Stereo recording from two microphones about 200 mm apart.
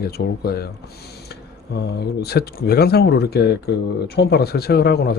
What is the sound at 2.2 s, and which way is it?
Speech, 55° left (ahead or behind).